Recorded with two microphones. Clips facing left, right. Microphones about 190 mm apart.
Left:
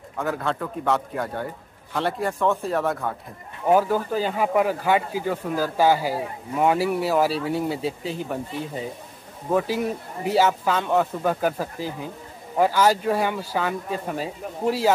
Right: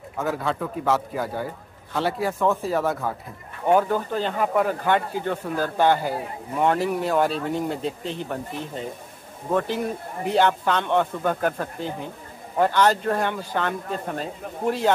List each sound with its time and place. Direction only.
0.2 s speech: centre (ahead or behind)